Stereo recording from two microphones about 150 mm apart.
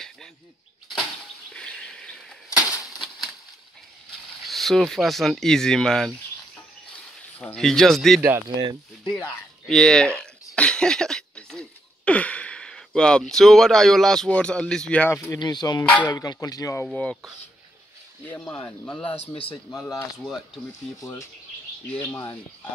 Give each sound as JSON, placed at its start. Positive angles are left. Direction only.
{"t": 1.5, "sound": "a sound", "side_deg": 5}
{"t": 4.5, "sound": "speech", "side_deg": 0}
{"t": 7.3, "sound": "speech", "side_deg": 5}
{"t": 8.2, "sound": "speech", "side_deg": -15}
{"t": 9.1, "sound": "speech", "side_deg": 5}
{"t": 15.1, "sound": "speech", "side_deg": 25}
{"t": 15.8, "sound": "speech", "side_deg": 10}
{"t": 16.1, "sound": "speech", "side_deg": 25}
{"t": 16.8, "sound": "speech", "side_deg": 10}
{"t": 18.3, "sound": "speech", "side_deg": 10}
{"t": 21.0, "sound": "speech", "side_deg": 20}